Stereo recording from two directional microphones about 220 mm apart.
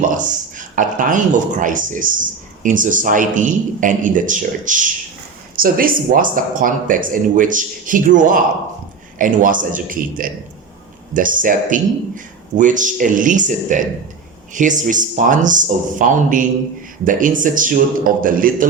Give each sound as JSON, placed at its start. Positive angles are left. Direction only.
{"t": 0.1, "sound": "speech", "side_deg": -35}